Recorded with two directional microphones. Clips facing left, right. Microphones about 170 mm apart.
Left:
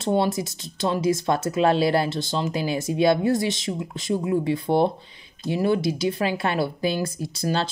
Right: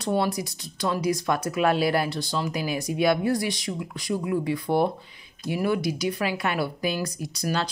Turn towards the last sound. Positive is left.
turn(degrees=25)  # may be behind; listen again after turning